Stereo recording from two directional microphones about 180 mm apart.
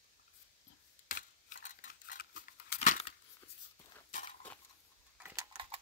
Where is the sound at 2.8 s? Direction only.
35° left (ahead or behind).